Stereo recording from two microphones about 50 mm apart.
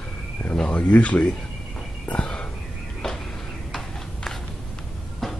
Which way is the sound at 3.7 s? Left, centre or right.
Centre.